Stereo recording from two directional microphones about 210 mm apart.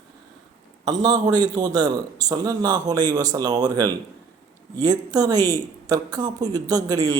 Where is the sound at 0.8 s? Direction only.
20° right (ahead or behind).